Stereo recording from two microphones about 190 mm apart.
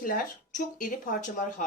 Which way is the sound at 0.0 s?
45° left (ahead or behind).